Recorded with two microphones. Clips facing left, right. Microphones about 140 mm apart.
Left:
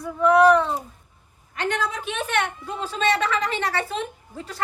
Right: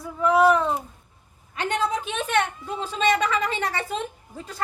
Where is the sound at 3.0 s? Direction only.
15° right (ahead or behind).